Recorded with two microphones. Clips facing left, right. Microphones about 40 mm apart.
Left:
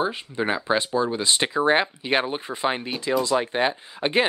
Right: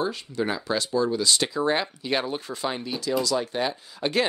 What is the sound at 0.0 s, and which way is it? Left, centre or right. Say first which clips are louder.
Speech: left 2 dB; left.